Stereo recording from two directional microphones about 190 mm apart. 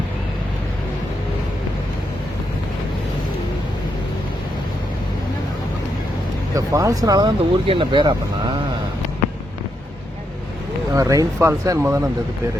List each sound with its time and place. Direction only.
6.5 s speech: 20° right (ahead or behind)
10.9 s speech: 20° right (ahead or behind)